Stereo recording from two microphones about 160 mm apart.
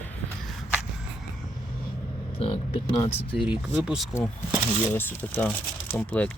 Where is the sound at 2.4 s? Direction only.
35° left (ahead or behind).